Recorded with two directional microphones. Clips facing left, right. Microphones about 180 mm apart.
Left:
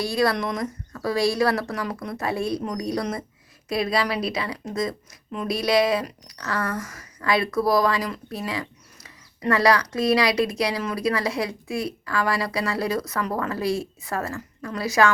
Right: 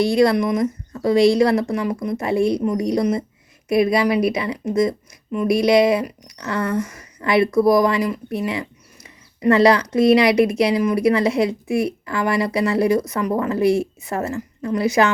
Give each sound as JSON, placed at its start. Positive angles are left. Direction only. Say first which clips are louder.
{"t": 0.0, "sound": "a woman's voice", "louder": "right 7 dB", "side_deg": -20}